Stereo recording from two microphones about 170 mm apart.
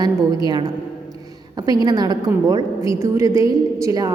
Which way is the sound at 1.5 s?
25° right (ahead or behind).